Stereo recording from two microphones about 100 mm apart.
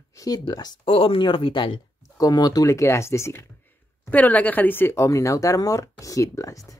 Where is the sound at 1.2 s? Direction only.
60° left (ahead or behind).